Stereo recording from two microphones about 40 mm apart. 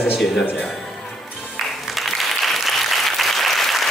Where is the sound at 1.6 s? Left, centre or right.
Centre.